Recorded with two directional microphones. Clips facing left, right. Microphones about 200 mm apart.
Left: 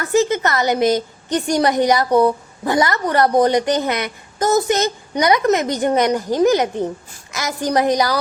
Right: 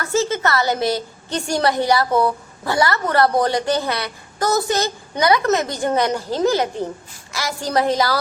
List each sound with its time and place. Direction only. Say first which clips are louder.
0.0 s a woman's voice: left 3 dB; 15° left (ahead or behind)